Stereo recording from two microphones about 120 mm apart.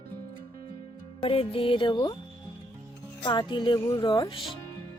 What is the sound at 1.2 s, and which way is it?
Music, 50° left (ahead or behind).